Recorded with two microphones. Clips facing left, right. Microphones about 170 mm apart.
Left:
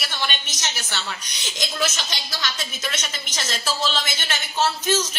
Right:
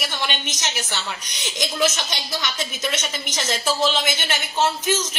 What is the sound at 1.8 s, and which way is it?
A woman's voice, 15° right (ahead or behind).